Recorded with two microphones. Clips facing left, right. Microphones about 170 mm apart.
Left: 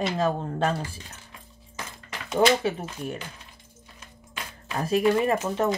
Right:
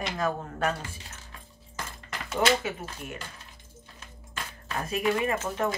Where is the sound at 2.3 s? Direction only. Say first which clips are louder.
Left 5 dB; 30° left (ahead or behind).